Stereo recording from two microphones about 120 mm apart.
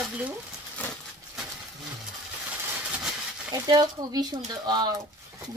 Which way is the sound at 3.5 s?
35° right (ahead or behind).